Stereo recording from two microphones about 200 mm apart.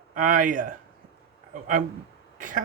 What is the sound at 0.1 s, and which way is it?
Speech, 45° right (ahead or behind).